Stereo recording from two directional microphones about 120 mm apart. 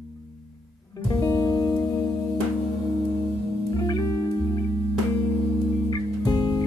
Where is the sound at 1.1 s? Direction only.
25° left (ahead or behind).